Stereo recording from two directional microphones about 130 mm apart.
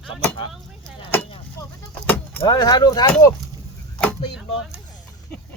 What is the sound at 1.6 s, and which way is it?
Vehicle, 25° left (ahead or behind).